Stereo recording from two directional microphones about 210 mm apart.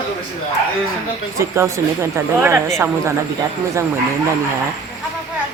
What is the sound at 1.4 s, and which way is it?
A man's voice, 15° right (ahead or behind).